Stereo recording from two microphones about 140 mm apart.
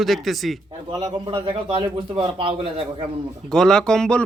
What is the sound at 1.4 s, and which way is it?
A man's voice, 40° right (ahead or behind).